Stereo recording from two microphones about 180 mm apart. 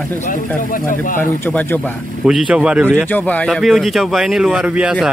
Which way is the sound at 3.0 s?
10° left (ahead or behind).